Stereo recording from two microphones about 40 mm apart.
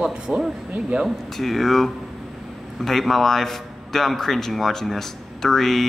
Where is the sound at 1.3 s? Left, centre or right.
Centre.